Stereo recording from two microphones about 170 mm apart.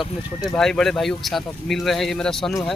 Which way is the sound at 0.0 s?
Centre (ahead or behind).